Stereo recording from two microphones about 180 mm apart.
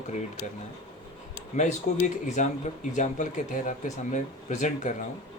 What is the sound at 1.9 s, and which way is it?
Speech, 40° left (ahead or behind).